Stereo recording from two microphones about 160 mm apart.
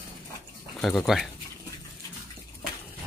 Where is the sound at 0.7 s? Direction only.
Centre (ahead or behind).